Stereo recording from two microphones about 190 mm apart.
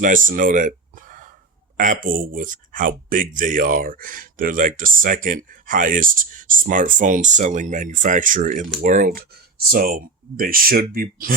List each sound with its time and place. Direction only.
0.0 s speech: 45° right (ahead or behind)